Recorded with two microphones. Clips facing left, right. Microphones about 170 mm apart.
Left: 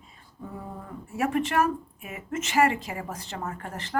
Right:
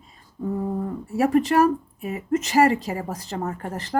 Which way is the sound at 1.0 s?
35° right (ahead or behind).